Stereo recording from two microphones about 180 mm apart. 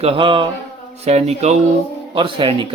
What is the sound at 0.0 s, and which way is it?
Speech, 30° right (ahead or behind).